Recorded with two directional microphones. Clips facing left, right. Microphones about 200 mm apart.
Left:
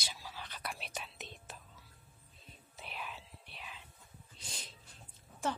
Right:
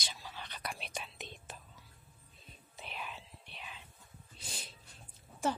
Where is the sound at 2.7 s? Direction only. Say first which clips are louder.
Right 1 dB; 5° left (ahead or behind).